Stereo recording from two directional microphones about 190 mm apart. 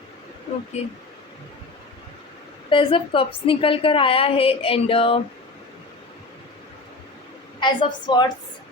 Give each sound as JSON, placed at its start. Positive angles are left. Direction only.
{"t": 2.6, "sound": "a woman's voice", "side_deg": 30}
{"t": 7.6, "sound": "a woman's voice", "side_deg": 25}